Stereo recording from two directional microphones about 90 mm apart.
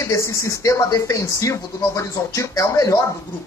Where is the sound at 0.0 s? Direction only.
35° left (ahead or behind).